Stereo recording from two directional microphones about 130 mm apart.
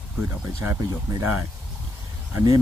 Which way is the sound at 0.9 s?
30° right (ahead or behind).